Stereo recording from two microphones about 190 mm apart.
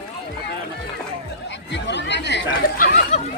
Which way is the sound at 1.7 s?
70° left (ahead or behind).